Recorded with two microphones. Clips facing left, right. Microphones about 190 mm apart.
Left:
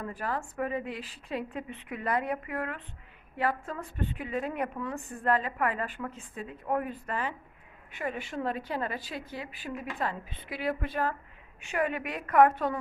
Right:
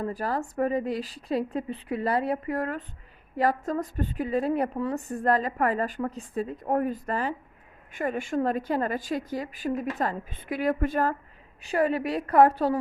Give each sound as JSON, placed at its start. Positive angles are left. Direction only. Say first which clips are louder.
{"t": 0.0, "sound": "a woman's voice", "louder": "right 5 dB", "side_deg": -35}